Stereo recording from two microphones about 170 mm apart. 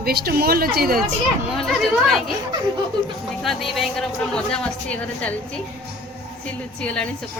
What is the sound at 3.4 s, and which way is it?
Speech, centre (ahead or behind).